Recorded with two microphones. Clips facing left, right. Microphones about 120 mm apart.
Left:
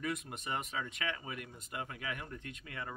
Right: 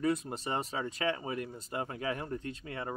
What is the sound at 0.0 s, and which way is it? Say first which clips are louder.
Speech: right 8 dB; 30° right (ahead or behind).